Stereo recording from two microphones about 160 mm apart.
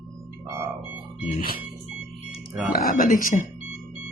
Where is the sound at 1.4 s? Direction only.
60° left (ahead or behind).